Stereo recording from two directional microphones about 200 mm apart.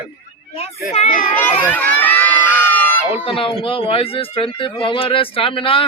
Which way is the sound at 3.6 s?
25° left (ahead or behind).